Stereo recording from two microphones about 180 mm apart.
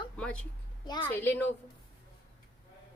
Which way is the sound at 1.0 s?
10° left (ahead or behind).